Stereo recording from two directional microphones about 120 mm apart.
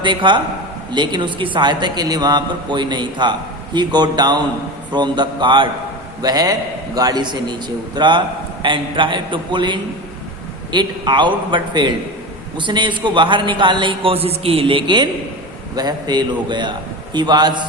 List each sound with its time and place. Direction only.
0.0 s a man's voice: 40° right (ahead or behind)